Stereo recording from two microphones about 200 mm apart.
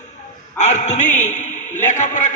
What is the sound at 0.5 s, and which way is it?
A man's voice, 35° left (ahead or behind).